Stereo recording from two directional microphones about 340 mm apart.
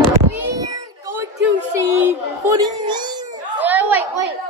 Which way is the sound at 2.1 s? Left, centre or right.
Centre.